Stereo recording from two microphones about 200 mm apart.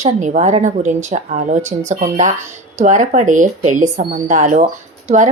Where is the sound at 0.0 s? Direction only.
35° right (ahead or behind).